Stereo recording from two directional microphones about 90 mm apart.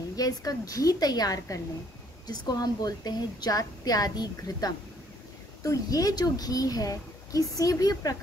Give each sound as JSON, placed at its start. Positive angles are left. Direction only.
{"t": 0.1, "sound": "a woman's voice", "side_deg": 45}